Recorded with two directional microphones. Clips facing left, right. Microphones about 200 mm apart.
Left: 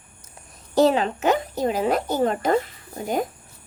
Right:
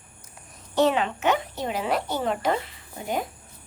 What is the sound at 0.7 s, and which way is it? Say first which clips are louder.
A woman's voice: left 4 dB; 40° left (ahead or behind).